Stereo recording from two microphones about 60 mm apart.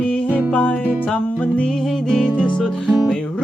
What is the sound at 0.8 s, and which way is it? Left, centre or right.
Music, right.